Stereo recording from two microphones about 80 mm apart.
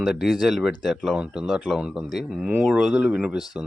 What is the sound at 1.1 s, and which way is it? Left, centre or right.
Speech, centre.